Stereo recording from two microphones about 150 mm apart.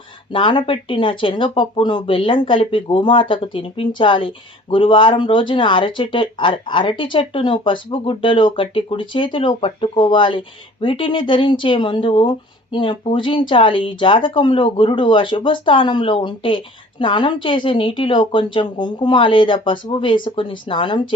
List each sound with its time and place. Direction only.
0.3 s speech: 35° left (ahead or behind)